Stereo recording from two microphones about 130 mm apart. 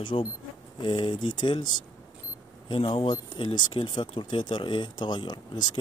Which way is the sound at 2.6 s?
40° left (ahead or behind).